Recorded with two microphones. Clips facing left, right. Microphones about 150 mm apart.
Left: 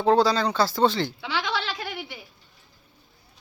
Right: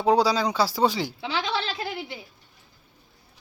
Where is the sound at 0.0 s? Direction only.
10° right (ahead or behind).